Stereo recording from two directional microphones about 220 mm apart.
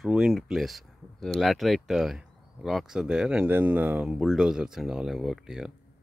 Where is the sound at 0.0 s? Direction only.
Centre (ahead or behind).